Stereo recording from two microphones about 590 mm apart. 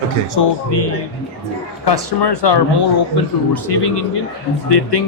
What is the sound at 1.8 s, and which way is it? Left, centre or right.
Speech, left.